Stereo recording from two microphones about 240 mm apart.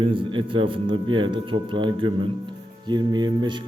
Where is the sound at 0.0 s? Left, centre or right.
Right.